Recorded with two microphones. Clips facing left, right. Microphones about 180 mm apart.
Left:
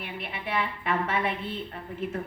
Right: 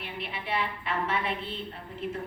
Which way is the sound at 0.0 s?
55° left (ahead or behind).